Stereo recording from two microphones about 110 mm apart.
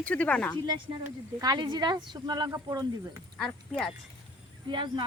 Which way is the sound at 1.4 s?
40° right (ahead or behind).